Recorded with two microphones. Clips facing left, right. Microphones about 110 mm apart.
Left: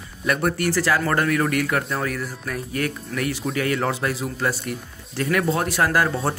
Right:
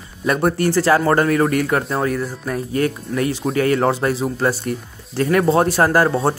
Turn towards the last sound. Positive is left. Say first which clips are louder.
# right 5 dB
turn(degrees=-35)  # may be behind; listen again after turning